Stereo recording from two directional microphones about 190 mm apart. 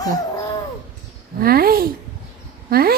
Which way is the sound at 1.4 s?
55° right (ahead or behind).